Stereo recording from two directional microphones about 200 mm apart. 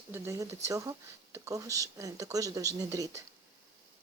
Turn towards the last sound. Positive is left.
turn(degrees=-15)  # may be behind; listen again after turning